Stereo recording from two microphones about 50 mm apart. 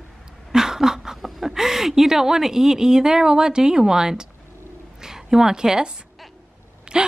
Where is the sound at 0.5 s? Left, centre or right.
Centre.